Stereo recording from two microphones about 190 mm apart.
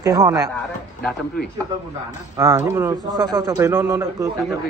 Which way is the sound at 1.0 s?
5° left (ahead or behind).